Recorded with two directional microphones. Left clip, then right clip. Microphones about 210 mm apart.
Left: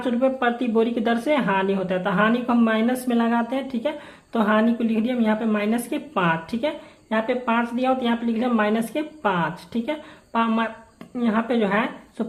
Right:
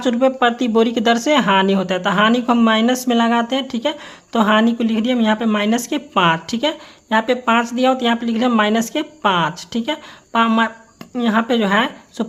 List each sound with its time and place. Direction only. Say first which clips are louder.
0.0 s speech: right 6 dB; 40° right (ahead or behind)